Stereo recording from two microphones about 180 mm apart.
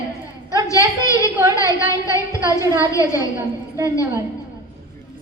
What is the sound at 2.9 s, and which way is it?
Speech, 15° left (ahead or behind).